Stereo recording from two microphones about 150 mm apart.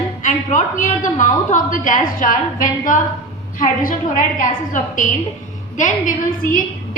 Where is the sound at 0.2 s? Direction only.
55° left (ahead or behind).